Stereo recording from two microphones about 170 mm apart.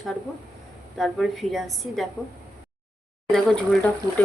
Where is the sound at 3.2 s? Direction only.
5° left (ahead or behind).